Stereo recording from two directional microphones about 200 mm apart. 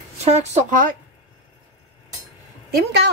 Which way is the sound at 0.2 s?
35° right (ahead or behind).